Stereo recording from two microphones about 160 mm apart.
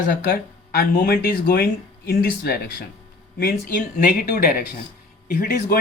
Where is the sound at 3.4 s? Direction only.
60° left (ahead or behind).